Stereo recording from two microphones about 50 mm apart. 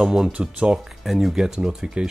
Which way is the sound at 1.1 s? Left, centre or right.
Centre.